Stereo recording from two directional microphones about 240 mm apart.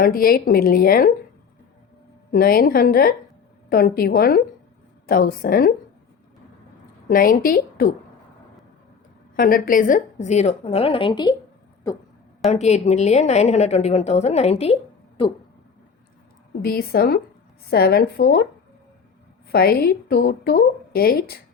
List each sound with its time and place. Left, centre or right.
0.0 s a woman's voice: left
2.3 s a woman's voice: left
7.1 s a woman's voice: left
9.3 s a woman's voice: left; by 11.3 s centre
12.5 s a woman's voice: left
16.6 s a woman's voice: left
19.5 s a woman's voice: left